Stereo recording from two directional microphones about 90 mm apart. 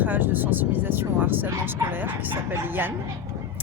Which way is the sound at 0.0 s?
20° right (ahead or behind).